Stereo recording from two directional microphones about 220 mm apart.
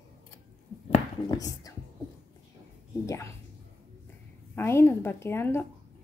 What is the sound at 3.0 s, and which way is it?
Speech, 15° left (ahead or behind).